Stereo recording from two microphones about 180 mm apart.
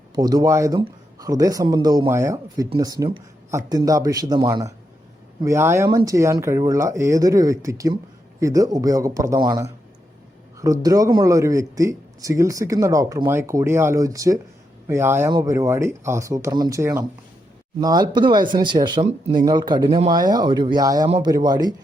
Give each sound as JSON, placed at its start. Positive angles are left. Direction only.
{"t": 0.2, "sound": "speech", "side_deg": -20}